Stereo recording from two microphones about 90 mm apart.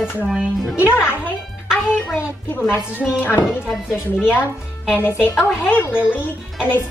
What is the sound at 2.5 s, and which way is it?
Speech, 25° left (ahead or behind).